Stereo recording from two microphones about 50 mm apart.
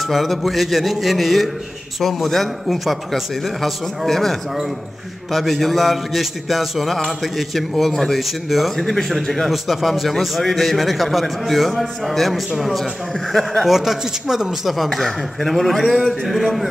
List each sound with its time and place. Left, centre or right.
0.0 s a man's voice: centre
13.7 s a man's voice: centre